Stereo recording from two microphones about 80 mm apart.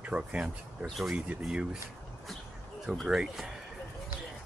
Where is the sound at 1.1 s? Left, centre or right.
Centre.